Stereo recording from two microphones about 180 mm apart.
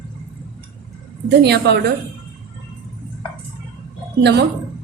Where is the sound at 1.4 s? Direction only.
65° right (ahead or behind).